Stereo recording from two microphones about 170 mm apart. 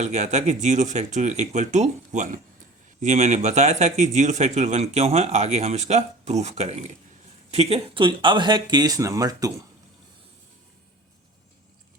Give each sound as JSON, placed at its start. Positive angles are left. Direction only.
{"t": 0.0, "sound": "speech", "side_deg": -45}